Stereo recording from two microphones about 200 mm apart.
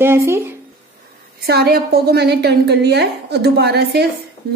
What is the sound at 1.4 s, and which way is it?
A woman's voice, 50° right (ahead or behind).